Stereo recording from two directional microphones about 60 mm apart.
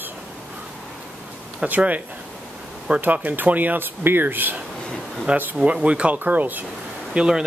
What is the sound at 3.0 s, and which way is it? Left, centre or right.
Speech, right.